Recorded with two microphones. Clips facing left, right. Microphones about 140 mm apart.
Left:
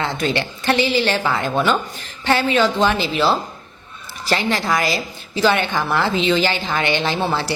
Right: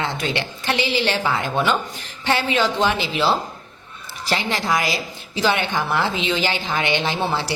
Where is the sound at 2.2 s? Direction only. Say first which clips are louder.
Left 3 dB; 15° right (ahead or behind).